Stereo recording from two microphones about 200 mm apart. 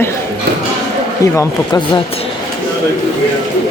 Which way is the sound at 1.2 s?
15° left (ahead or behind).